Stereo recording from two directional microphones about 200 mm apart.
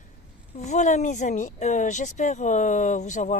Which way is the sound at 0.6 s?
35° left (ahead or behind).